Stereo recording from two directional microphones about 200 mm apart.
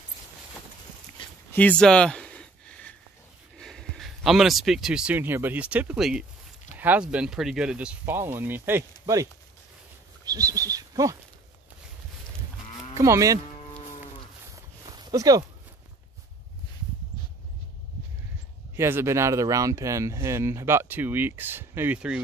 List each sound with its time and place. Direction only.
1.5 s a sound: 5° left (ahead or behind)
3.5 s speech: centre (ahead or behind); by 9.3 s 15° right (ahead or behind)
10.2 s a sound: 20° right (ahead or behind)
12.9 s moo: 15° right (ahead or behind)
14.5 s walk: 20° right (ahead or behind)
18.8 s speech: 10° right (ahead or behind)